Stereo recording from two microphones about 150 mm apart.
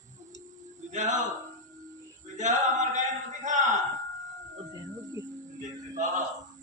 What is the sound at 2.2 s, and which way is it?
Male singing, 55° right (ahead or behind).